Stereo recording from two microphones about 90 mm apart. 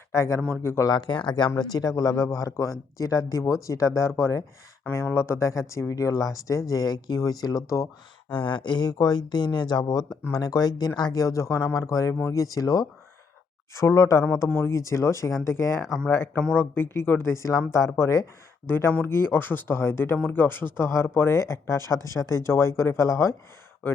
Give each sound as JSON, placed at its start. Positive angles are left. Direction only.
{"t": 0.1, "sound": "a man's voice", "side_deg": 35}
{"t": 0.9, "sound": "a man's voice", "side_deg": 55}
{"t": 8.3, "sound": "a man's voice", "side_deg": 65}
{"t": 16.4, "sound": "speech", "side_deg": 15}
{"t": 16.7, "sound": "speech", "side_deg": 25}
{"t": 17.3, "sound": "a man's voice", "side_deg": 35}